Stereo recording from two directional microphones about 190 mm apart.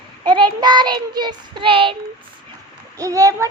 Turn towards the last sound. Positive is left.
turn(degrees=-15)  # may be behind; listen again after turning